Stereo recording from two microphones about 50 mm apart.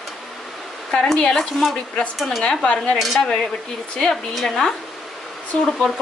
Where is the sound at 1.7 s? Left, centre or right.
Left.